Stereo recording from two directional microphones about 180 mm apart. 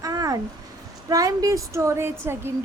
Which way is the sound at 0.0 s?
20° right (ahead or behind).